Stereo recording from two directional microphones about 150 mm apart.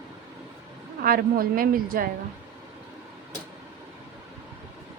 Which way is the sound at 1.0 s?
75° right (ahead or behind).